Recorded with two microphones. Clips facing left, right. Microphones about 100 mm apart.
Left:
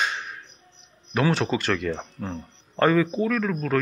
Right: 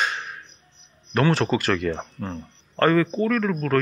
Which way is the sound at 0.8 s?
Centre (ahead or behind).